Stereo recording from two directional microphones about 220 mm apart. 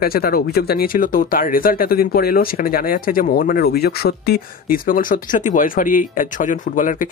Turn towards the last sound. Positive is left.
turn(degrees=35)  # may be behind; listen again after turning